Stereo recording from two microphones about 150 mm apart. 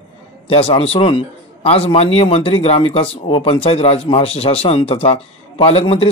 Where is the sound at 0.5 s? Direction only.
40° left (ahead or behind).